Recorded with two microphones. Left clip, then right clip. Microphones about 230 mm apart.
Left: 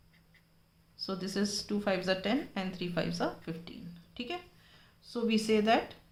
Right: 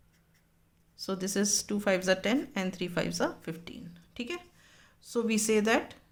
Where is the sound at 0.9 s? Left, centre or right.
Right.